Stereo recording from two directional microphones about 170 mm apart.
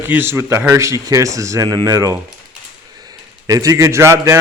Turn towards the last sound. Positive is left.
turn(degrees=-15)  # may be behind; listen again after turning